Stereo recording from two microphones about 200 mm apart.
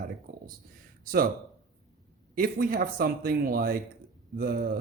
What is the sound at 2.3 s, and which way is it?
Speech, 45° right (ahead or behind).